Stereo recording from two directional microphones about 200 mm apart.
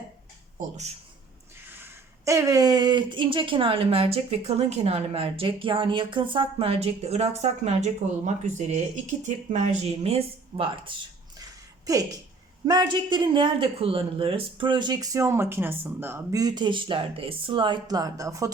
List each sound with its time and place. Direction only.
1.7 s speech: 15° right (ahead or behind); by 10.9 s 30° right (ahead or behind)
11.9 s a woman's voice: 15° right (ahead or behind)